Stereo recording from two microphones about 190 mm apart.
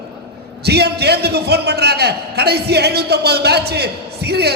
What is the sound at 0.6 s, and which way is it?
A man's voice, 60° right (ahead or behind).